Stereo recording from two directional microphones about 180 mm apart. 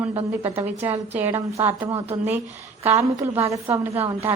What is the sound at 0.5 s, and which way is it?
A woman's voice, 10° right (ahead or behind).